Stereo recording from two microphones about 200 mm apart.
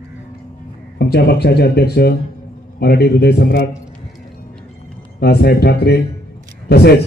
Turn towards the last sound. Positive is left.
turn(degrees=55)  # may be behind; listen again after turning